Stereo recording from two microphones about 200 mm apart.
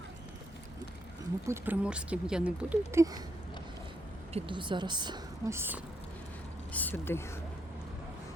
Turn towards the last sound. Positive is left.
turn(degrees=10)  # may be behind; listen again after turning